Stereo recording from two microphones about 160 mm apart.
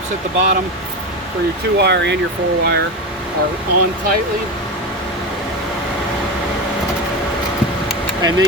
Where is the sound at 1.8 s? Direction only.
90° right.